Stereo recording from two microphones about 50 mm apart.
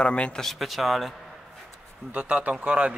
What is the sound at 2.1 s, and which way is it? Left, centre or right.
Speech, right.